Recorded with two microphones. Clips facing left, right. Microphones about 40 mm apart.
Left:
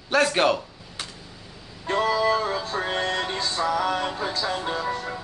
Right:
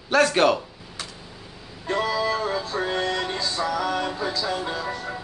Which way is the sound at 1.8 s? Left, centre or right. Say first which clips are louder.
Left 2 dB; left.